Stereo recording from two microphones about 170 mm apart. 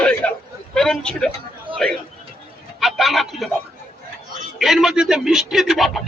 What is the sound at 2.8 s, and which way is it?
Speech, centre (ahead or behind).